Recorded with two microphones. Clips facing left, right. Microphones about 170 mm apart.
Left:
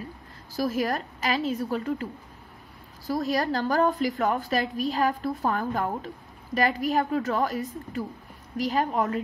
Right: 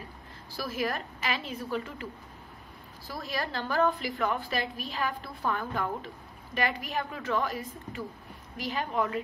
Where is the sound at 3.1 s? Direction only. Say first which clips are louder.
Left 9 dB; 40° left (ahead or behind).